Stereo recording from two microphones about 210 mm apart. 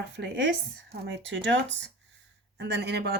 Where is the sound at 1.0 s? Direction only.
60° right (ahead or behind).